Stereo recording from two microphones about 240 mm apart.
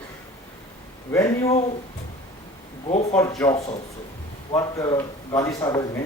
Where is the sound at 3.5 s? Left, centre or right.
Left.